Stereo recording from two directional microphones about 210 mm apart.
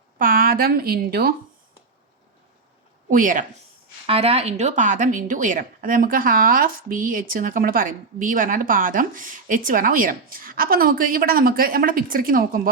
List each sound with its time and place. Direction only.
0.2 s a woman's voice: 40° right (ahead or behind)
3.1 s speech: 40° right (ahead or behind)
4.0 s speech: 30° right (ahead or behind)